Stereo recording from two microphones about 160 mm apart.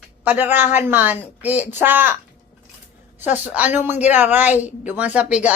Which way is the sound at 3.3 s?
10° right (ahead or behind).